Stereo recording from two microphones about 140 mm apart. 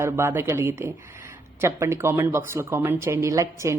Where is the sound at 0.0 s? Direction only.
15° right (ahead or behind).